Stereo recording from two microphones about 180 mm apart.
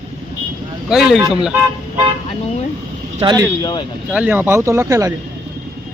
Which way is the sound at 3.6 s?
20° left (ahead or behind).